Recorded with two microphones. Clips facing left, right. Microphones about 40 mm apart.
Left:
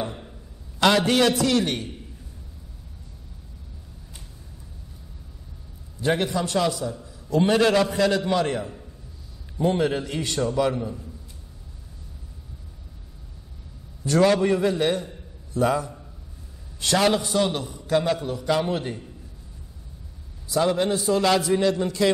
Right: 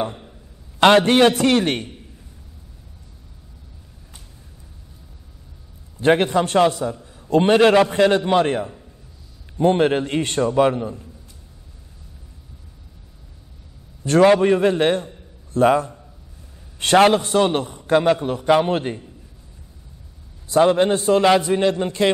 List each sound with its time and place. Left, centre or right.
0.7 s a man's voice: right
5.9 s a man's voice: right
10.7 s a man's voice: right
14.0 s a man's voice: right
20.5 s a man's voice: right
21.3 s a man's voice: right